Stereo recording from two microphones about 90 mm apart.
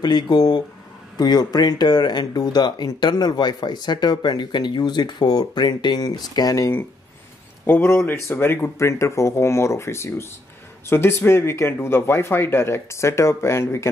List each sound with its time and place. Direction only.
0.0 s speech: 50° left (ahead or behind)
7.6 s speech: 25° left (ahead or behind)